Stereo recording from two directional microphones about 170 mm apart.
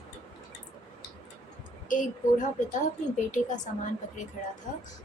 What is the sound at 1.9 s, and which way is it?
A woman's voice, 50° left (ahead or behind).